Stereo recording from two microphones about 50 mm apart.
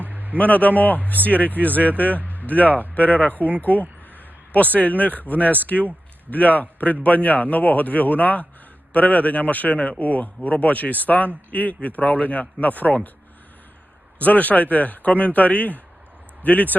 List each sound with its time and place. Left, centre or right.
0.0 s a sound: right
0.3 s a man's voice: left
2.1 s a sound: right
2.5 s a man's voice: left
3.3 s speech: right
4.5 s a man's voice: left
14.2 s a man's voice: left